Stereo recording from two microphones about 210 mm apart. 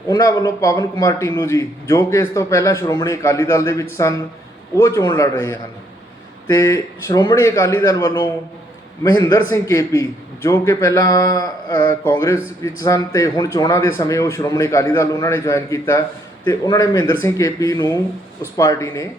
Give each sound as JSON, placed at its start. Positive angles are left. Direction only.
{"t": 0.1, "sound": "a man's voice", "side_deg": 20}